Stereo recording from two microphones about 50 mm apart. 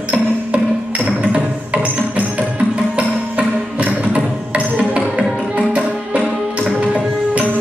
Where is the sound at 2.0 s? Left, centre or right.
Right.